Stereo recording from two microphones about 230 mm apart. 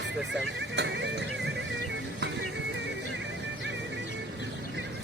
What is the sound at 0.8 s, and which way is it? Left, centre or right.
Music, right.